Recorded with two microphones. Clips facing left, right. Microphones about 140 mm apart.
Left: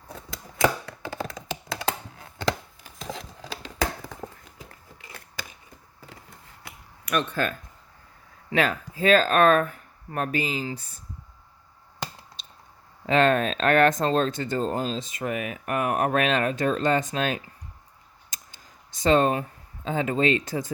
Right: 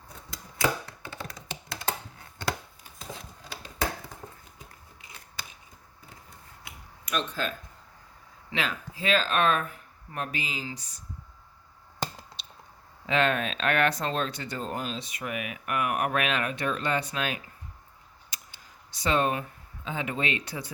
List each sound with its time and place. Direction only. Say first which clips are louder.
2.4 s chopping: left 5 dB; 90° left
5.0 s a sound: left 4 dB; 75° left (ahead or behind)
6.6 s finger snapping: left 3 dB; 60° left (ahead or behind)
8.5 s speech: left 8 dB; 45° left (ahead or behind)
13.1 s speech: left 5 dB; 40° left (ahead or behind)
14.6 s speech: left 4 dB; 35° left (ahead or behind)
18.3 s a sound: left 1 dB; 40° left (ahead or behind)
19.0 s speech: left 6 dB; 35° left (ahead or behind)